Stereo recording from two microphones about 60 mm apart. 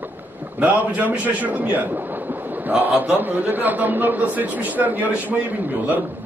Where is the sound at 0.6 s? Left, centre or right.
Right.